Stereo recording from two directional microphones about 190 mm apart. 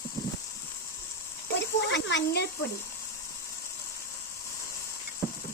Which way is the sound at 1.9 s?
65° left (ahead or behind).